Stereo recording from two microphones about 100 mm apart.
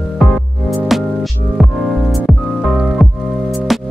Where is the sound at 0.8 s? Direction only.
Centre (ahead or behind).